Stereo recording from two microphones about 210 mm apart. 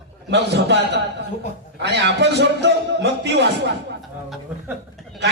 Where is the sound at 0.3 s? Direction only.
55° right (ahead or behind).